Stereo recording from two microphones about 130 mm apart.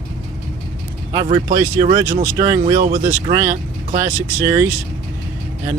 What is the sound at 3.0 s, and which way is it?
Speech, 25° right (ahead or behind).